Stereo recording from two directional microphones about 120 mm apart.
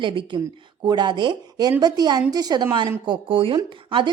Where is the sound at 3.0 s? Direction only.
45° right (ahead or behind).